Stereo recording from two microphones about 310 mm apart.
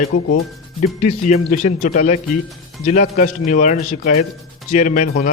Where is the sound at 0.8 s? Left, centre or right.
Left.